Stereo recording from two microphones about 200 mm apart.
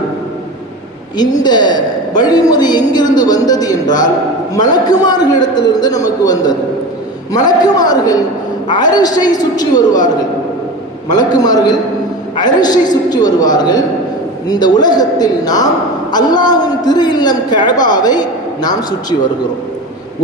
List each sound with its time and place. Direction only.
1.1 s a woman's voice: 20° left (ahead or behind)
11.1 s a woman's voice: 20° left (ahead or behind)